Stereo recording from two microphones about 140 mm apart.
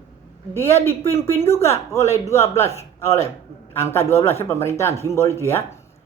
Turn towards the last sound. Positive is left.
turn(degrees=20)  # may be behind; listen again after turning